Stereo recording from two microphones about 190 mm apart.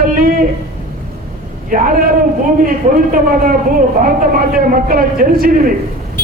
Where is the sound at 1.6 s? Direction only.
45° right (ahead or behind).